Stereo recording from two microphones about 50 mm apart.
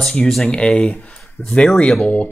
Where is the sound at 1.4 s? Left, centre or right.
Left.